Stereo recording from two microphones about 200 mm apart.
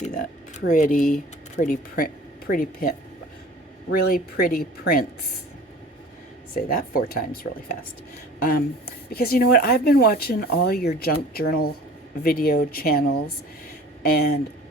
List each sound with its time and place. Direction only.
0.7 s speech: 40° left (ahead or behind)
3.9 s speech: 50° left (ahead or behind)
6.5 s speech: 50° left (ahead or behind)
8.4 s speech: 50° left (ahead or behind)